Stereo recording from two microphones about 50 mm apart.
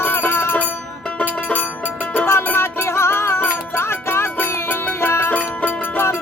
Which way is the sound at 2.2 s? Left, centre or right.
Left.